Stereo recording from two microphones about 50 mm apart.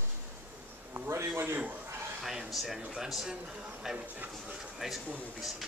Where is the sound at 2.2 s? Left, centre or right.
Centre.